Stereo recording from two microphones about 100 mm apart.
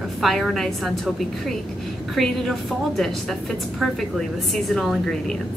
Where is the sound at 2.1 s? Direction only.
Centre (ahead or behind).